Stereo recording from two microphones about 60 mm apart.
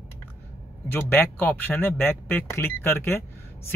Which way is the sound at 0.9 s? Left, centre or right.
Left.